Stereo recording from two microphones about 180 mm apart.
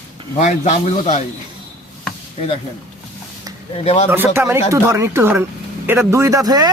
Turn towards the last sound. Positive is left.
turn(degrees=-20)  # may be behind; listen again after turning